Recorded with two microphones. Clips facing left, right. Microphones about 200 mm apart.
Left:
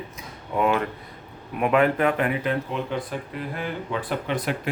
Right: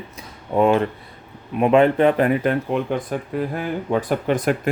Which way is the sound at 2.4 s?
55° right (ahead or behind).